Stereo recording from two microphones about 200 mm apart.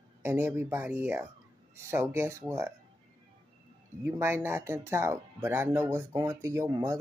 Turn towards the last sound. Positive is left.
turn(degrees=-20)  # may be behind; listen again after turning